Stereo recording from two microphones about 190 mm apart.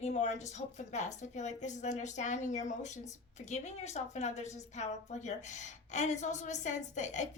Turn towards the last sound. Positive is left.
turn(degrees=40)  # may be behind; listen again after turning